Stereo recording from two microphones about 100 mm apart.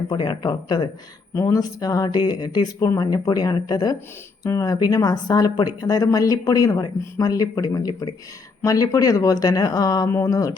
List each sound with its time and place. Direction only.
0.1 s speech: 40° left (ahead or behind)
1.3 s speech: 30° left (ahead or behind)